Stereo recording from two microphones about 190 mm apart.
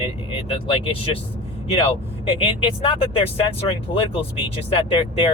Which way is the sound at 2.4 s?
25° left (ahead or behind).